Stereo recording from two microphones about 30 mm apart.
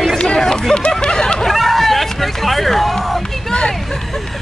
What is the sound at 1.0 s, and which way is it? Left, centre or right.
Snicker, left.